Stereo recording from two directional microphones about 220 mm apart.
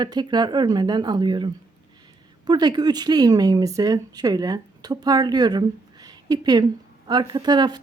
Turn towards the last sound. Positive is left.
turn(degrees=-20)  # may be behind; listen again after turning